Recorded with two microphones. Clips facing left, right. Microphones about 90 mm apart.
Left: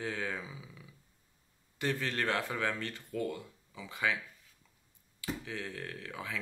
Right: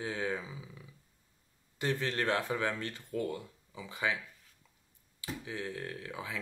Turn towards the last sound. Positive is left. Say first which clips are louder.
# right 1 dB
turn(degrees=-15)  # may be behind; listen again after turning